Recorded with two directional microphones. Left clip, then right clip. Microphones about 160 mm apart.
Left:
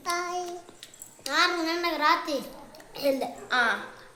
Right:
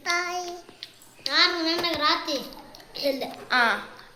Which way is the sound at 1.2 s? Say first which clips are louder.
Right 3 dB; 60° left (ahead or behind).